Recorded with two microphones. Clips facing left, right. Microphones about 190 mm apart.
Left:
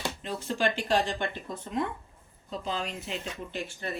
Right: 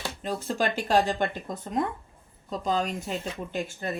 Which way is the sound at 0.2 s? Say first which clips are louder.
Right 3 dB; 45° right (ahead or behind).